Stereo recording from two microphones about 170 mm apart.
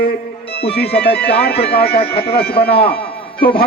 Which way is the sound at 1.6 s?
35° left (ahead or behind).